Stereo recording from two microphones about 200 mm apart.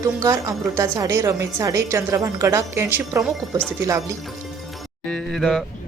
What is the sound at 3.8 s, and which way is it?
Speech, 15° right (ahead or behind).